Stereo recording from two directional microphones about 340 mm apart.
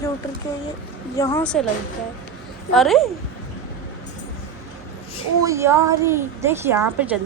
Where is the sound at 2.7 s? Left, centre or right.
Centre.